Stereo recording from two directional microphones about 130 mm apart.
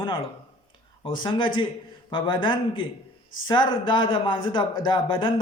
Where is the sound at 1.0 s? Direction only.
40° left (ahead or behind).